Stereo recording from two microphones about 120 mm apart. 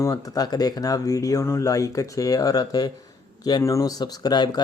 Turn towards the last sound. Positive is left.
turn(degrees=35)  # may be behind; listen again after turning